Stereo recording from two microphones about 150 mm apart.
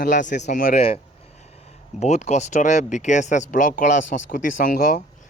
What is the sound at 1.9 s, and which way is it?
Speech, 50° left (ahead or behind).